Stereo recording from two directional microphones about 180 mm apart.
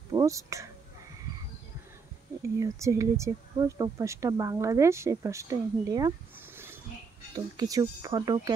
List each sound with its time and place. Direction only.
0.1 s speech: 20° right (ahead or behind)
2.4 s speech: 15° right (ahead or behind)